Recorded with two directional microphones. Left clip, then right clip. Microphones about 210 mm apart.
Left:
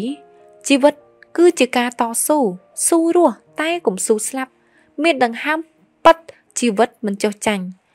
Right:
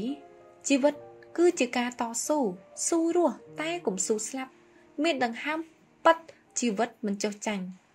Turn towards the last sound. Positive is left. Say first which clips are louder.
# left 12 dB
turn(degrees=50)  # may be behind; listen again after turning